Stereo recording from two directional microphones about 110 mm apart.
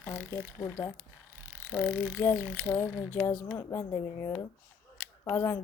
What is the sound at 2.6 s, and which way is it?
Speech, 20° left (ahead or behind).